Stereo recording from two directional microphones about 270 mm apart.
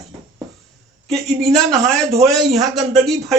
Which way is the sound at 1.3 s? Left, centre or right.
Centre.